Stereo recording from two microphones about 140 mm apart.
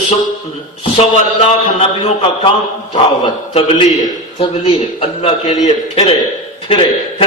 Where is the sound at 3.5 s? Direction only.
45° left (ahead or behind).